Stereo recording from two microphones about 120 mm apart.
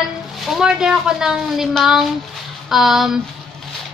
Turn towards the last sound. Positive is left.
turn(degrees=-5)  # may be behind; listen again after turning